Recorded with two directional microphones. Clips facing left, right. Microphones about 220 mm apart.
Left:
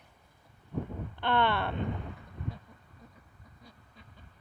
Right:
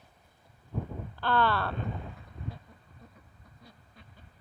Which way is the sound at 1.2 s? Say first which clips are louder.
Even; 20° left (ahead or behind).